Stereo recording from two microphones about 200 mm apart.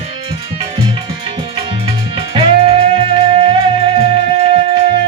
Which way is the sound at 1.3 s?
25° right (ahead or behind).